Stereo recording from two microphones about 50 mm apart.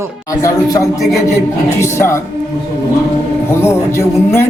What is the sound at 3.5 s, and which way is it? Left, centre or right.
Speech, left.